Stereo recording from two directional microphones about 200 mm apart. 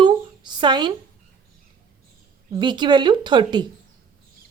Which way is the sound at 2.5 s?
20° right (ahead or behind).